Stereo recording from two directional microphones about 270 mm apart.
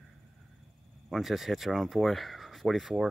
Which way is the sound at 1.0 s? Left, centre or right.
Centre.